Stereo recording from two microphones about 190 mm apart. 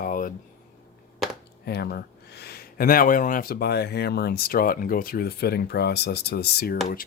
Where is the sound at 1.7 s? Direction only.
55° left (ahead or behind).